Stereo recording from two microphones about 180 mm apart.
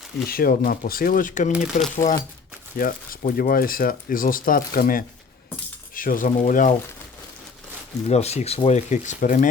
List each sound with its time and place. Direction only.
0.3 s speech: 55° left (ahead or behind)
8.1 s speech: 35° left (ahead or behind)